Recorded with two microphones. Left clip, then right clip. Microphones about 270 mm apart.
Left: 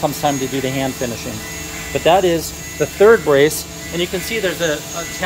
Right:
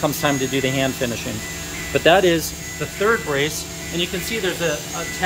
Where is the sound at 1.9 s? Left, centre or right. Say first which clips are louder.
Left 1 dB; centre.